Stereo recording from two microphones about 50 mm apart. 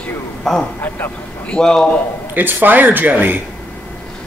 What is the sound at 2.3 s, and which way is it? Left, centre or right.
A man's voice, right.